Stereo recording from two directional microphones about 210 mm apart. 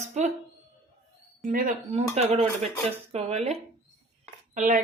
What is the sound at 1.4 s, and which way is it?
Speech, 40° right (ahead or behind).